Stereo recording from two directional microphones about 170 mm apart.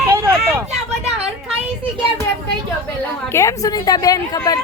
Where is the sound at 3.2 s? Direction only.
15° left (ahead or behind).